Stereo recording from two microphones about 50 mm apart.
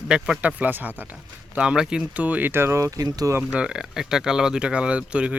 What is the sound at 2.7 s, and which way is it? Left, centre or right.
Speech, right.